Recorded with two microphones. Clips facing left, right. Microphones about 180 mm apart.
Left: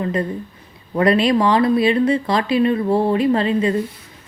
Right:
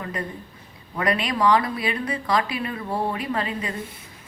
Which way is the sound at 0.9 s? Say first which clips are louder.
Left 9 dB; 25° left (ahead or behind).